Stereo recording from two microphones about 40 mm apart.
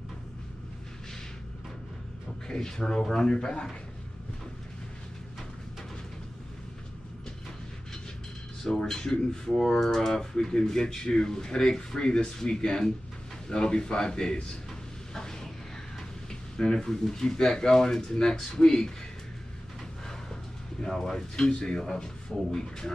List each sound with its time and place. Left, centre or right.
2.4 s a man's voice: centre
8.8 s a man's voice: centre
15.1 s a sound: centre
16.3 s speech: centre
20.8 s speech: centre
21.5 s speech: left